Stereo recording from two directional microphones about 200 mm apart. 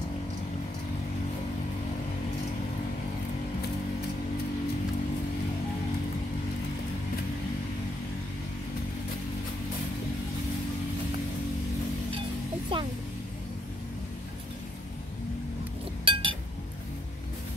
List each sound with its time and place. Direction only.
12.7 s music: 25° right (ahead or behind)
16.1 s chink: 25° right (ahead or behind)